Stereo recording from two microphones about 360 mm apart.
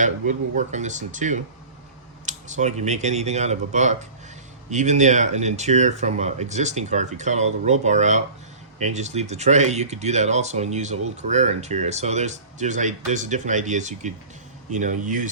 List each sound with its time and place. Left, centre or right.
0.0 s speech: centre